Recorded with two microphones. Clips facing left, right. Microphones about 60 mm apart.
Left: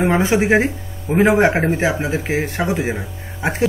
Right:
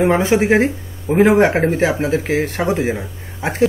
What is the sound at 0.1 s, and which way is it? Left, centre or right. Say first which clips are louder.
Speech: right 1 dB; left.